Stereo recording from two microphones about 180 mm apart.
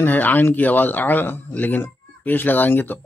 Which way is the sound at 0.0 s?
10° left (ahead or behind).